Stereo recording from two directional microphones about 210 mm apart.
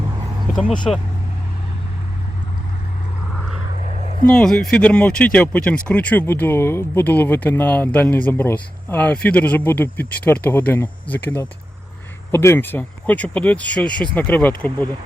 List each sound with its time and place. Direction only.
3.8 s dog: 35° right (ahead or behind)
4.3 s speech: 5° left (ahead or behind)